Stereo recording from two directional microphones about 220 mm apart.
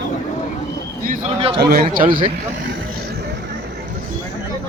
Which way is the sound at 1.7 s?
45° right (ahead or behind).